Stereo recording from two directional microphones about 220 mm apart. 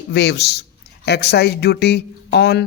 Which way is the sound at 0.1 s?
50° left (ahead or behind).